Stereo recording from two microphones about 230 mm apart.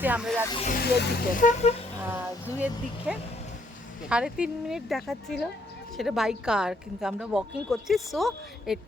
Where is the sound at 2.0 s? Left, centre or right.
Centre.